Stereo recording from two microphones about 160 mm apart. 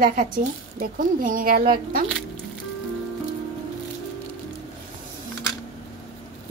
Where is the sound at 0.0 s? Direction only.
55° right (ahead or behind).